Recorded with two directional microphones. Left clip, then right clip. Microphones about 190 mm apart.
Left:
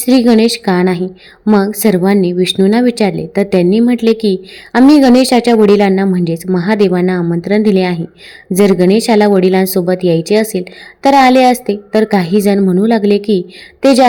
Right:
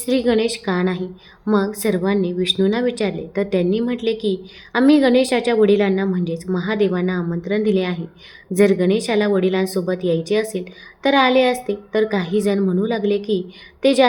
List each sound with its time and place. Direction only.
0.0 s speech: 35° left (ahead or behind)